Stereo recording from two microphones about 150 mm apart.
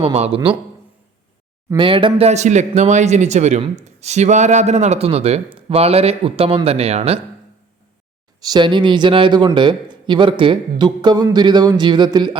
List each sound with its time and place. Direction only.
0.0 s speech: 40° right (ahead or behind)
1.7 s speech: 35° right (ahead or behind)
8.4 s speech: 30° right (ahead or behind)